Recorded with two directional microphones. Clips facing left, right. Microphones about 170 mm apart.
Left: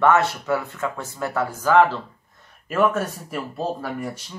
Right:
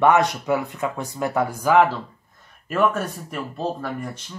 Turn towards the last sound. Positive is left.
turn(degrees=5)  # may be behind; listen again after turning